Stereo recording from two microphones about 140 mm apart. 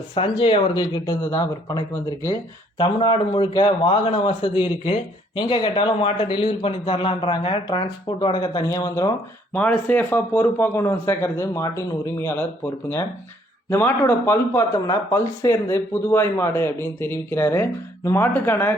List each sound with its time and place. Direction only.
0.1 s speech: 40° left (ahead or behind)
9.5 s speech: 10° left (ahead or behind)